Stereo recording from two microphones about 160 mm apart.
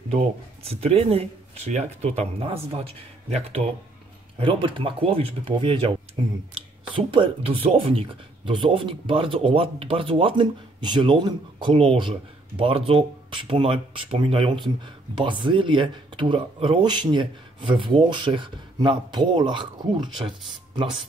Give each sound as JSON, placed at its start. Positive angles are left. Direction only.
{"t": 0.7, "sound": "speech", "side_deg": -40}
{"t": 7.0, "sound": "speech", "side_deg": -30}